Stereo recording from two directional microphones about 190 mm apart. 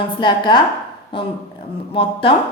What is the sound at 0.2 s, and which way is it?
A woman's voice, 25° left (ahead or behind).